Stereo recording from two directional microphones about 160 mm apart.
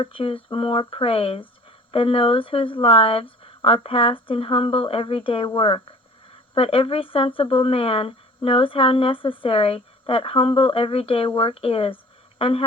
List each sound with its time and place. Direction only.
0.0 s speech: 35° left (ahead or behind)